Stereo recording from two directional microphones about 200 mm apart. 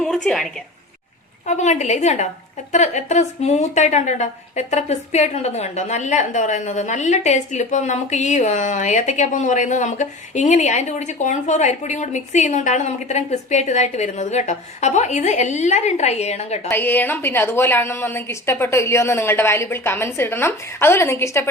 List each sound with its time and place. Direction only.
0.3 s speech: centre (ahead or behind)
1.5 s a woman's voice: 35° left (ahead or behind)
16.6 s a woman's voice: 10° left (ahead or behind)